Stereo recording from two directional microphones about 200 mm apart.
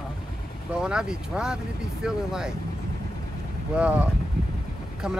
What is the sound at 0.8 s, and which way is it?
Speech, 5° right (ahead or behind).